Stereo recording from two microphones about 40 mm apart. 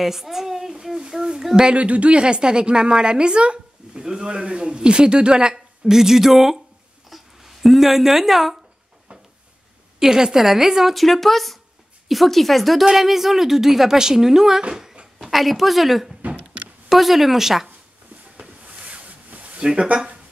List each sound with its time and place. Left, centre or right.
0.0 s a child's voice: centre
1.6 s a woman's voice: right; by 8.5 s centre
9.9 s speech: centre
11.0 s a woman's voice: centre
14.7 s a sound: centre
15.2 s a woman's voice: centre
16.2 s a sound: right
16.9 s a woman's voice: centre
18.4 s a sound: right
19.6 s a woman's voice: centre